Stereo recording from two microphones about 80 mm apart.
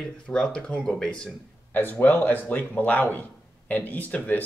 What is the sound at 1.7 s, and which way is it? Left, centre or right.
Speech, left.